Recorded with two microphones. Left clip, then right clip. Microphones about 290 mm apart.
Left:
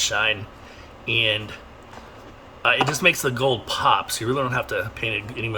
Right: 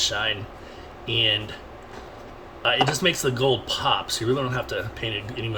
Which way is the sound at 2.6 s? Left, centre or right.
Centre.